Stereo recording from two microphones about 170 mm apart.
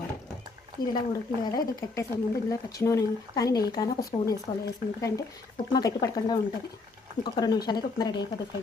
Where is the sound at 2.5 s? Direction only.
20° left (ahead or behind).